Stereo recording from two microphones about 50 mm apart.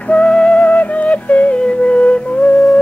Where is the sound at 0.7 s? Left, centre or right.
Left.